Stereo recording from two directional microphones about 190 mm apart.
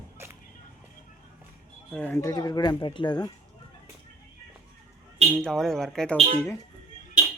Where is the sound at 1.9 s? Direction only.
5° left (ahead or behind).